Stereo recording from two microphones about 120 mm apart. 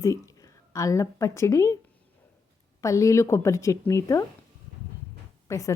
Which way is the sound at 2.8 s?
25° left (ahead or behind).